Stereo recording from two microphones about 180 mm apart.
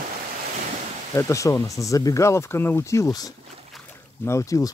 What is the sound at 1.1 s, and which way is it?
Speech, 15° left (ahead or behind).